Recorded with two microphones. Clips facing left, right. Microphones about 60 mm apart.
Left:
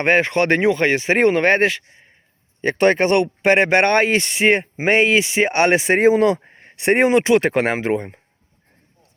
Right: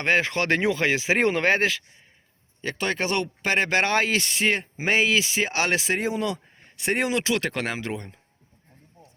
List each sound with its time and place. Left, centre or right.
0.2 s speech: centre
2.6 s speech: left
3.4 s speech: centre
5.9 s speech: left
6.9 s speech: left